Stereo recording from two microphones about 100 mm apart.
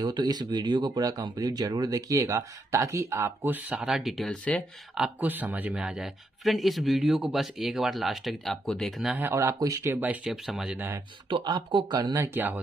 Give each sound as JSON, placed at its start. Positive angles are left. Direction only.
{"t": 0.0, "sound": "speech", "side_deg": -45}
{"t": 3.8, "sound": "a man's voice", "side_deg": -5}
{"t": 5.2, "sound": "a man's voice", "side_deg": -15}
{"t": 9.3, "sound": "a man's voice", "side_deg": -30}
{"t": 10.2, "sound": "a man's voice", "side_deg": 0}
{"t": 11.2, "sound": "speech", "side_deg": -55}
{"t": 11.7, "sound": "speech", "side_deg": -40}